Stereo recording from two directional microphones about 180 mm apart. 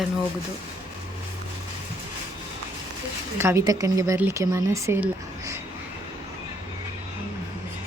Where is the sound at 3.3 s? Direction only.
15° right (ahead or behind).